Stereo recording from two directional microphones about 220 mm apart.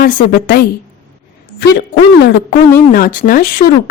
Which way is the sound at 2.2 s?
45° left (ahead or behind).